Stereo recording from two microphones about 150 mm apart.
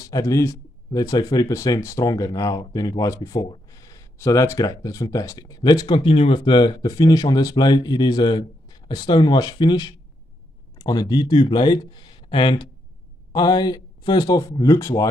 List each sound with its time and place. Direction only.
0.0 s speech: 20° left (ahead or behind)